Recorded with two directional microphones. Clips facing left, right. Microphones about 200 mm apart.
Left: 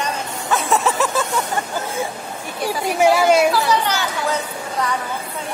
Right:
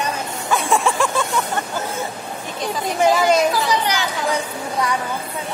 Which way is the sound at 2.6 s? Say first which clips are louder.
Left 2 dB; 10° left (ahead or behind).